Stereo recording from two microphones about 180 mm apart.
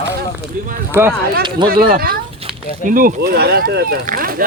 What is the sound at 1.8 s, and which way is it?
Speech, 55° right (ahead or behind).